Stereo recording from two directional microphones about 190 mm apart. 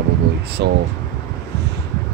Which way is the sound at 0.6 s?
65° right (ahead or behind).